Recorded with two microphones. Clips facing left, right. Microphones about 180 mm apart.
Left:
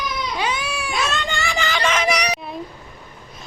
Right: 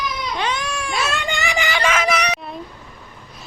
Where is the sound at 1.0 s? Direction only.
10° right (ahead or behind).